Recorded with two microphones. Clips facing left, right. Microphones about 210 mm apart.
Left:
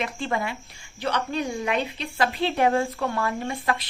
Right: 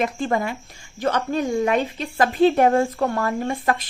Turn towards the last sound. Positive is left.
turn(degrees=-45)  # may be behind; listen again after turning